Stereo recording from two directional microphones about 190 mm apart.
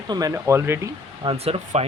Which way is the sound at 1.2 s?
30° right (ahead or behind).